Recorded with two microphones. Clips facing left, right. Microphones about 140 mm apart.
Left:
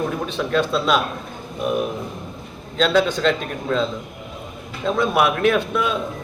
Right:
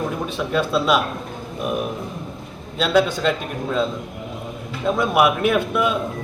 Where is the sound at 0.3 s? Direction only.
5° right (ahead or behind).